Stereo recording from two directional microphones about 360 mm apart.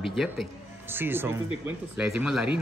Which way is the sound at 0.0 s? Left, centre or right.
Centre.